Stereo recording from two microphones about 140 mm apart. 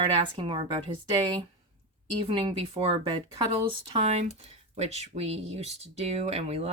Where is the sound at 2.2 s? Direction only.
35° right (ahead or behind).